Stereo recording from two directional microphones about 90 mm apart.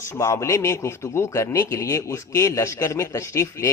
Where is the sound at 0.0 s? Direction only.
30° left (ahead or behind).